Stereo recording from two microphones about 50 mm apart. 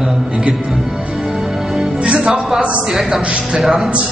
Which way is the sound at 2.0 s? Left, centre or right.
Right.